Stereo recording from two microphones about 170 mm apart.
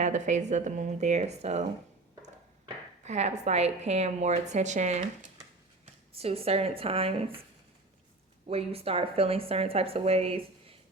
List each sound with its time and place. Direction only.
0.0 s speech: 45° right (ahead or behind)
3.0 s a woman's voice: 40° right (ahead or behind)
8.4 s a woman's voice: 35° right (ahead or behind)